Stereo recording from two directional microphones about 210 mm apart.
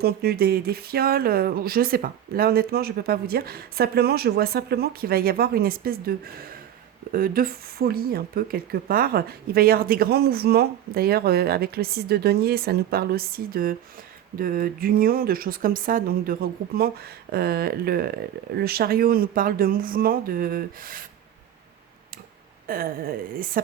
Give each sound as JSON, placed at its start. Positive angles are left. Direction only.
{"t": 0.0, "sound": "speech", "side_deg": -50}
{"t": 22.6, "sound": "speech", "side_deg": -45}